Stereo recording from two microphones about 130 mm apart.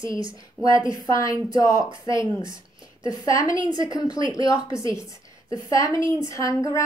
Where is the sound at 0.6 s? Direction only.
5° right (ahead or behind).